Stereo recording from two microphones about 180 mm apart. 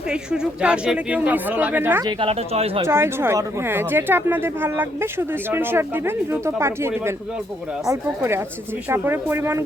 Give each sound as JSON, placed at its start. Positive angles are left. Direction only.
{"t": 0.1, "sound": "speech", "side_deg": -5}
{"t": 2.0, "sound": "speech", "side_deg": -30}
{"t": 2.8, "sound": "speech", "side_deg": -15}